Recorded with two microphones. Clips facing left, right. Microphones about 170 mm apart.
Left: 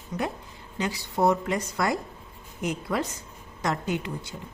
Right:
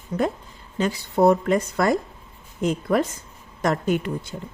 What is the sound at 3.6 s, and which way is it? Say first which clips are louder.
Speech: right 6 dB; 55° right (ahead or behind).